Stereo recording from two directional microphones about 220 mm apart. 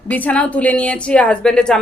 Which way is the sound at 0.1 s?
5° left (ahead or behind).